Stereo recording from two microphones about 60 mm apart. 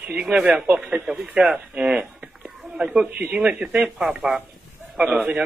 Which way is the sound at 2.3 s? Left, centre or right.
Centre.